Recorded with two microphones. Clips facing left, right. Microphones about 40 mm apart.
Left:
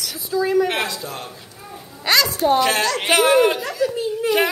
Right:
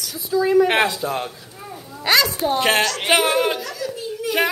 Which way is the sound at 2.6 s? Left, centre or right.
Right.